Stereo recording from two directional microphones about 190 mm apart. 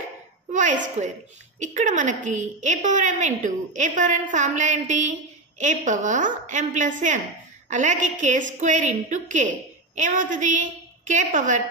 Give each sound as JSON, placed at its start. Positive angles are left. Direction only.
{"t": 0.5, "sound": "a woman's voice", "side_deg": -40}